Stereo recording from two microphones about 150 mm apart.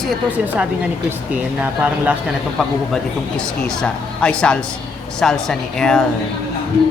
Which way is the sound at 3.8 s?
5° left (ahead or behind).